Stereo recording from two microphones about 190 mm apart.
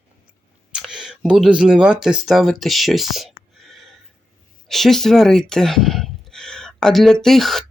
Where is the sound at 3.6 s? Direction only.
Centre (ahead or behind).